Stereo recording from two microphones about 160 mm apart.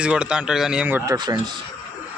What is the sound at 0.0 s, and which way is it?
Speech, 5° right (ahead or behind).